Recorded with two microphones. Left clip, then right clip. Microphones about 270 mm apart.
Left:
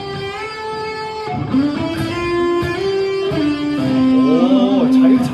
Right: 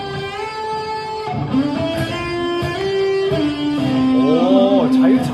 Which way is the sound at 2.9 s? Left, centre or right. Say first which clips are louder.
Right 3 dB; right.